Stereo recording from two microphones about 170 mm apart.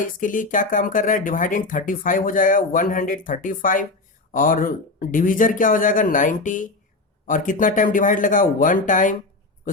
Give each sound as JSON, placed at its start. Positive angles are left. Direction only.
{"t": 0.0, "sound": "speech", "side_deg": 50}